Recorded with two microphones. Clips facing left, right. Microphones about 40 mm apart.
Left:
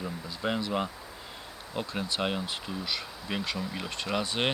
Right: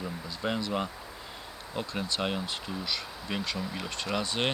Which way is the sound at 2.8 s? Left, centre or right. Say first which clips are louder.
Even; left.